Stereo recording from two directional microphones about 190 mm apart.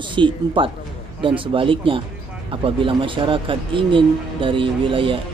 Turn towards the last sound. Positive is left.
turn(degrees=-25)  # may be behind; listen again after turning